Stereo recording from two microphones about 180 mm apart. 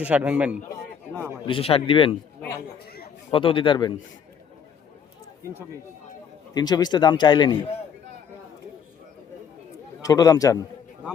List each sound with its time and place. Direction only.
0.0 s a man's voice: 10° right (ahead or behind)
1.5 s a man's voice: 30° left (ahead or behind)
2.7 s a sound: 60° left (ahead or behind)
3.2 s a man's voice: 30° left (ahead or behind)
6.5 s a man's voice: 20° left (ahead or behind)
10.0 s a man's voice: 20° left (ahead or behind)